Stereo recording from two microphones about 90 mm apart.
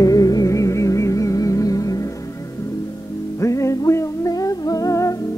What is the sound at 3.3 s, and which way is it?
Music, 35° left (ahead or behind).